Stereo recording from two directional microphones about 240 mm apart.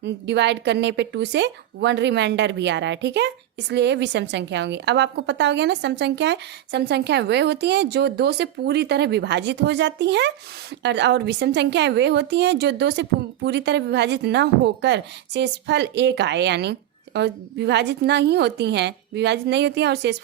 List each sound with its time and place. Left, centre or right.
0.0 s speech: right